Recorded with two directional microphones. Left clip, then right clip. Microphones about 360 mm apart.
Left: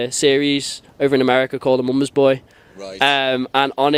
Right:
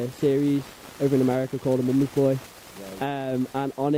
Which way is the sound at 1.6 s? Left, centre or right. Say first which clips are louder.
Left 7 dB; left.